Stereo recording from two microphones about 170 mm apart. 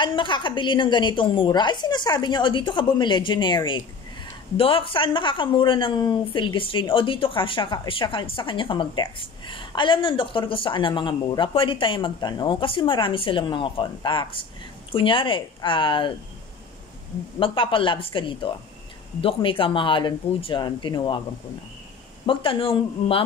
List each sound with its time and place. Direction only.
0.0 s a woman's voice: 30° left (ahead or behind)
17.4 s a woman's voice: 30° left (ahead or behind)
22.2 s speech: 30° left (ahead or behind)